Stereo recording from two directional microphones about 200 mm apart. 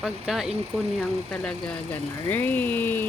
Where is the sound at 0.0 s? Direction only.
Centre (ahead or behind).